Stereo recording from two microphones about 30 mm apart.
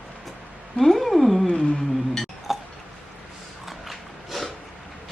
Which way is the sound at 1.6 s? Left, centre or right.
Centre.